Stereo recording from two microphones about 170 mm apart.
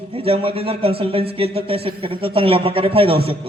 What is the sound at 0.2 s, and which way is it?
A man's voice, 35° right (ahead or behind).